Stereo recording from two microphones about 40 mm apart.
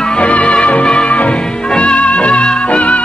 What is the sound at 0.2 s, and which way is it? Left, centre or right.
Music, left.